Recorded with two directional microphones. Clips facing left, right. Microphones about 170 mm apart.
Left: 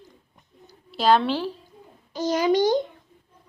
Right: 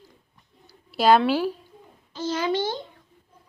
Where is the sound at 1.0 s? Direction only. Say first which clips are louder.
Right 2 dB; 10° right (ahead or behind).